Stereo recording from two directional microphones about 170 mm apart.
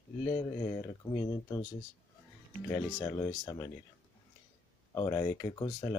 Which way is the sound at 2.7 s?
20° left (ahead or behind).